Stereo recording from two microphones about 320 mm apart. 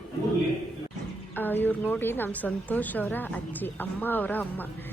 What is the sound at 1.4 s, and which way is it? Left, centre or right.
A woman's voice, centre.